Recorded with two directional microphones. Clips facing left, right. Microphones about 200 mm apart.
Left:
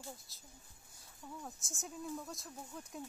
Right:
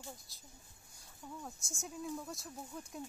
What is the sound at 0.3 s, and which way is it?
Speech, centre (ahead or behind).